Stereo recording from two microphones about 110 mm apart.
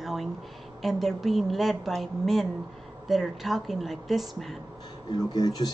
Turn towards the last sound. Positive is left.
turn(degrees=40)  # may be behind; listen again after turning